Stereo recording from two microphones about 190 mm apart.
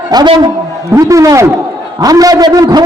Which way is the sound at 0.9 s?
15° right (ahead or behind).